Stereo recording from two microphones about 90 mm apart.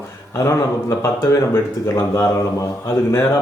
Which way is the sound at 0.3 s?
35° left (ahead or behind).